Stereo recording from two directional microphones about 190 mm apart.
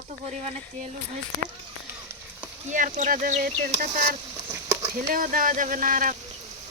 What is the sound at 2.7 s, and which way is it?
Speech, 45° right (ahead or behind).